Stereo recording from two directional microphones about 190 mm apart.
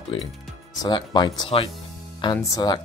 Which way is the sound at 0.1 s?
25° left (ahead or behind).